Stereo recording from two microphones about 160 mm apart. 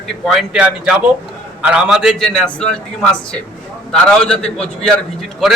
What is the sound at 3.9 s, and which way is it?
A man's voice, 5° left (ahead or behind).